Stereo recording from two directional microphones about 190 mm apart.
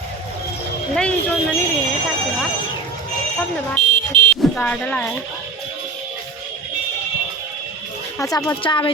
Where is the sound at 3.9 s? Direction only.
25° right (ahead or behind).